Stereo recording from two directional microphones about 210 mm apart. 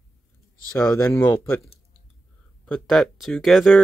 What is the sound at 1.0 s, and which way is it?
Speech, 15° left (ahead or behind).